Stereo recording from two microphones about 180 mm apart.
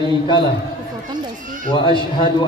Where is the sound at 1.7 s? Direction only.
25° left (ahead or behind).